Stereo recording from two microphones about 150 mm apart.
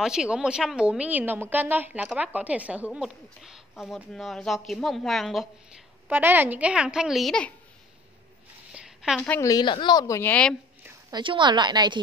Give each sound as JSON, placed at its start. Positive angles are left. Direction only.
{"t": 0.0, "sound": "a woman's voice", "side_deg": -5}
{"t": 6.0, "sound": "a woman's voice", "side_deg": -10}
{"t": 8.7, "sound": "a sound", "side_deg": -5}
{"t": 9.2, "sound": "a woman's voice", "side_deg": 10}
{"t": 9.5, "sound": "a woman's voice", "side_deg": 30}
{"t": 11.1, "sound": "a woman's voice", "side_deg": -30}